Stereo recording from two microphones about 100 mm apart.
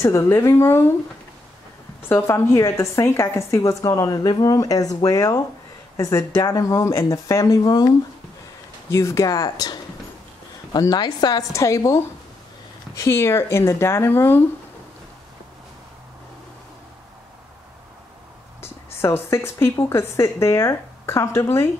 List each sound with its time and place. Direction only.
0.0 s a woman's voice: 25° left (ahead or behind)
2.0 s a woman's voice: 25° left (ahead or behind)
7.6 s speech: 45° left (ahead or behind)
8.9 s a woman's voice: 30° left (ahead or behind)
10.8 s a woman's voice: 45° left (ahead or behind); by 14.4 s 25° left (ahead or behind)
18.6 s a woman's voice: 25° left (ahead or behind)